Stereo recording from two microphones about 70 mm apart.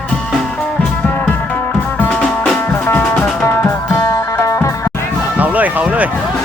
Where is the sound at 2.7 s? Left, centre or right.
Left.